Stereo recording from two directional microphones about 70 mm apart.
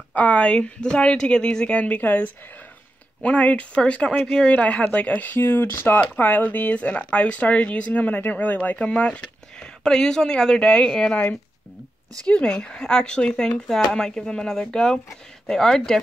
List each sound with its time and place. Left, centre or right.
0.1 s speech: centre
12.3 s speech: centre